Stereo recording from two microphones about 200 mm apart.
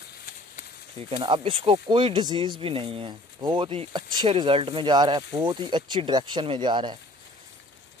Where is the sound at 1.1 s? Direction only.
25° right (ahead or behind).